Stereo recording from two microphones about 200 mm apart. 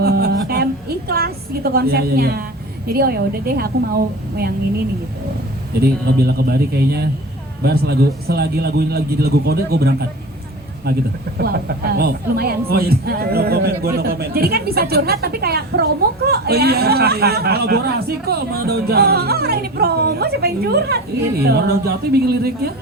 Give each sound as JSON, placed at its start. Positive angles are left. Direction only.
{"t": 0.0, "sound": "a sound", "side_deg": -50}
{"t": 1.7, "sound": "a woman's voice", "side_deg": -50}
{"t": 5.8, "sound": "a woman's voice", "side_deg": -50}